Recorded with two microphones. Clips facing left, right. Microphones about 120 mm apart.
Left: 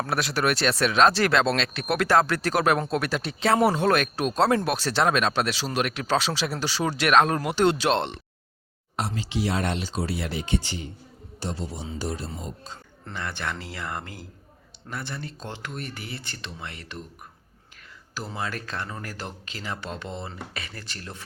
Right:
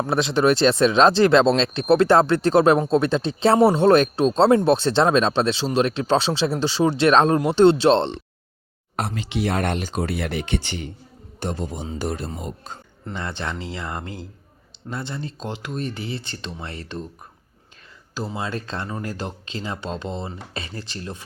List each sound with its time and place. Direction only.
0.0 s speech: 25° right (ahead or behind)
9.0 s speech: 60° right (ahead or behind)
11.3 s speech: 50° right (ahead or behind)
13.1 s speech: 25° right (ahead or behind)
18.3 s speech: 25° right (ahead or behind)